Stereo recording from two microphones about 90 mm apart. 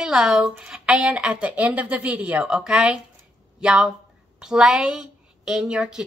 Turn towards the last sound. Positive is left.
turn(degrees=-10)  # may be behind; listen again after turning